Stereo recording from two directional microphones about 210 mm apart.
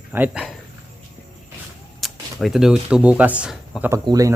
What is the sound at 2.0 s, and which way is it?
Speech, centre (ahead or behind).